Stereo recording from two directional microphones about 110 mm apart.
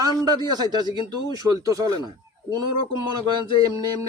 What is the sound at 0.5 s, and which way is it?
Speech, 40° right (ahead or behind).